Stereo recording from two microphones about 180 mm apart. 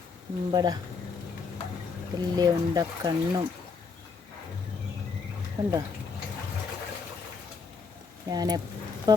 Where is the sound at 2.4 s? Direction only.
20° right (ahead or behind).